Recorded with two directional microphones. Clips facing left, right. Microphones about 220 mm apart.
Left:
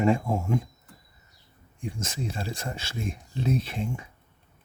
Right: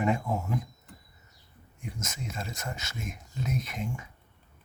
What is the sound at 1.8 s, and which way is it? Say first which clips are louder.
Speech: left 6 dB; 30° left (ahead or behind).